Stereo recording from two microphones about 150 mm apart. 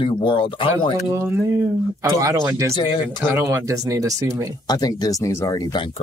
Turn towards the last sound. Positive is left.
turn(degrees=30)  # may be behind; listen again after turning